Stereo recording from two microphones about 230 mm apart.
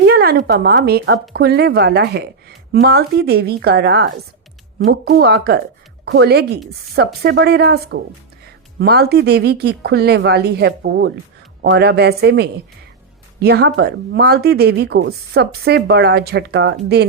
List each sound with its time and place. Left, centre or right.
0.0 s a woman's voice: right